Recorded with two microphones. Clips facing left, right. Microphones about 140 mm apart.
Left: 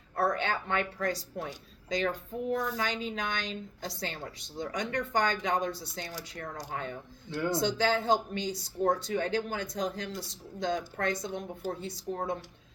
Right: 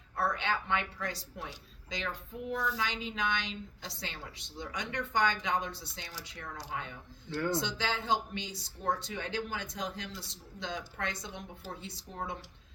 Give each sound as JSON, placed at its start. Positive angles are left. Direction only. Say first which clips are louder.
{"t": 0.2, "sound": "a woman's voice", "louder": "left 3 dB", "side_deg": 40}
{"t": 7.3, "sound": "speech", "louder": "left 1 dB", "side_deg": 15}
{"t": 7.6, "sound": "a woman's voice", "louder": "left 8 dB", "side_deg": 40}